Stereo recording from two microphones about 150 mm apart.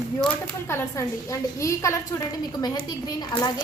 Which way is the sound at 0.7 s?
20° left (ahead or behind).